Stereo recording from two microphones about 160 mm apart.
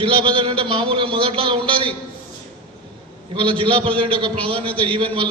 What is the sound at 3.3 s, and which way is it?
A man's voice, 35° right (ahead or behind).